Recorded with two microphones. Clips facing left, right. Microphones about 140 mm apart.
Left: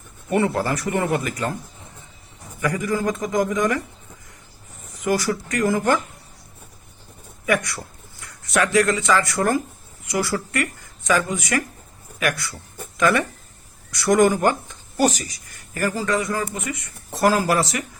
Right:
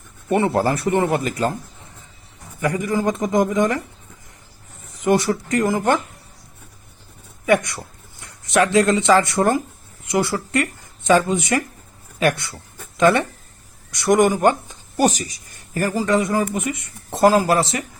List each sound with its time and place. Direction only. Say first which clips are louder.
0.3 s speech: right 3 dB; 30° right (ahead or behind)
2.6 s speech: right 2 dB; 25° right (ahead or behind)
5.0 s speech: right 4 dB; 25° right (ahead or behind)
7.4 s speech: right 4 dB; 25° right (ahead or behind)